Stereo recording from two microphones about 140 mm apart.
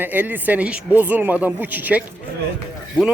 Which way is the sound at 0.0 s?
15° right (ahead or behind).